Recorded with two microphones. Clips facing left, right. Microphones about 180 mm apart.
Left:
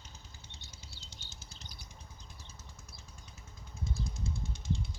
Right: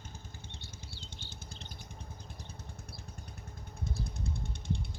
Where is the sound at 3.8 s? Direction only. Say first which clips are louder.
Even; 60° right (ahead or behind).